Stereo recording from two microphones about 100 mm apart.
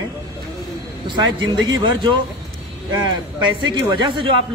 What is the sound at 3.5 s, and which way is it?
Speech, 55° right (ahead or behind).